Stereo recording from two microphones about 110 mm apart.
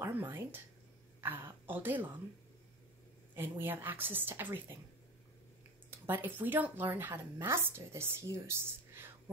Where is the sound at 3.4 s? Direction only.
20° right (ahead or behind).